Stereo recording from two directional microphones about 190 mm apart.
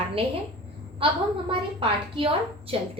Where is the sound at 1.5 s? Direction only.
25° right (ahead or behind).